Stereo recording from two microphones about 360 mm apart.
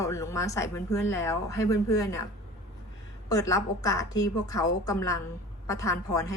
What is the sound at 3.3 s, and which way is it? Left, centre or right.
A woman's voice, centre.